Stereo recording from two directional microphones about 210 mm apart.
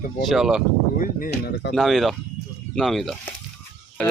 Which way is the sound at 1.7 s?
Centre (ahead or behind).